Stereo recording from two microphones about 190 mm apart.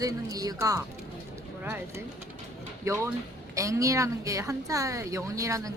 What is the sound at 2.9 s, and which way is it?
Speech, 15° right (ahead or behind).